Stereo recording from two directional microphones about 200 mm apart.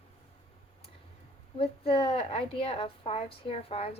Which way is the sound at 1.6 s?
25° left (ahead or behind).